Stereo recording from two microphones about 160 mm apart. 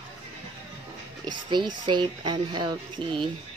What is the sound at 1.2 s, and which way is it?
Speech, 30° right (ahead or behind).